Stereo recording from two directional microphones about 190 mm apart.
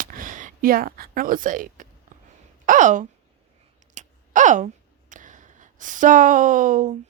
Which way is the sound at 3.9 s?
40° right (ahead or behind).